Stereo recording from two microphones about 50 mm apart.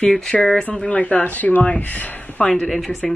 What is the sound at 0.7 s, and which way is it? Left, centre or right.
Speech, left.